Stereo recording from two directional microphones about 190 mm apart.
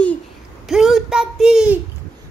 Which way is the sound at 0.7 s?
Centre (ahead or behind).